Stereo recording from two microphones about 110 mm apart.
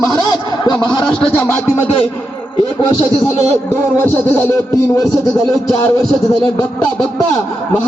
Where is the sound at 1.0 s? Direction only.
10° left (ahead or behind).